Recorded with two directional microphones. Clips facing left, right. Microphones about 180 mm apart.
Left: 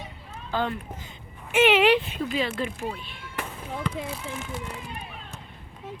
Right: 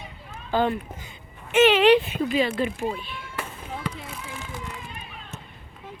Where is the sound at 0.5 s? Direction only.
10° right (ahead or behind).